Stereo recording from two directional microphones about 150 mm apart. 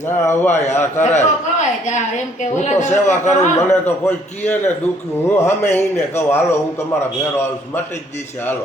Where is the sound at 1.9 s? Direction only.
55° left (ahead or behind).